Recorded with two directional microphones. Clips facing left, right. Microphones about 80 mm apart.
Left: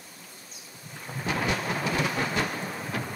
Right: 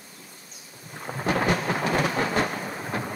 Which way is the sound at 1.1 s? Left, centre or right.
Right.